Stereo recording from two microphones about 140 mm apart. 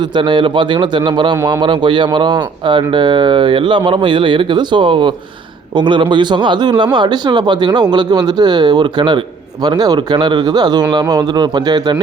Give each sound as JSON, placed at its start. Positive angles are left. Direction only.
{"t": 0.1, "sound": "speech", "side_deg": -35}